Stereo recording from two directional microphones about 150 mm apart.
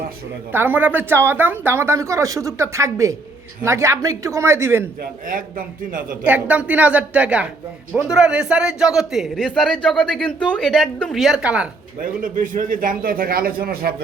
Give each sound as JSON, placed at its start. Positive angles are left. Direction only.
{"t": 0.5, "sound": "speech", "side_deg": -15}
{"t": 5.3, "sound": "a man's voice", "side_deg": -65}
{"t": 6.2, "sound": "a man's voice", "side_deg": -10}
{"t": 11.9, "sound": "a man's voice", "side_deg": -65}